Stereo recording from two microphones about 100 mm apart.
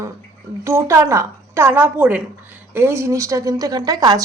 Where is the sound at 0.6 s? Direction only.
30° right (ahead or behind).